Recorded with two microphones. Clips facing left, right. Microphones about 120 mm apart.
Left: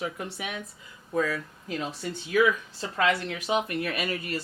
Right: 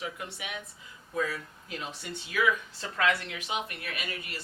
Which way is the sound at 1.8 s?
40° left (ahead or behind).